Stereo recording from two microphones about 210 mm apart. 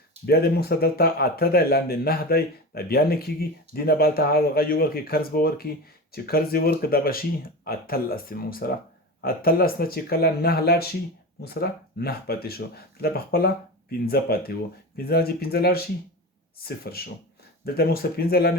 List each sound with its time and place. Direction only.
0.3 s speech: 50° left (ahead or behind)